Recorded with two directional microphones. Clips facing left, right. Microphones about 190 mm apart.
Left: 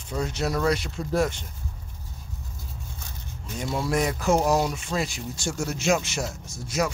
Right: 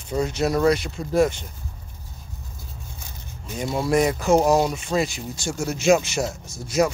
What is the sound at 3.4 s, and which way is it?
Speech, 10° right (ahead or behind).